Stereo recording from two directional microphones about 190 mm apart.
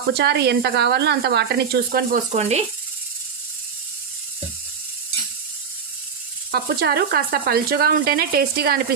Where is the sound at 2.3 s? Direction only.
35° right (ahead or behind).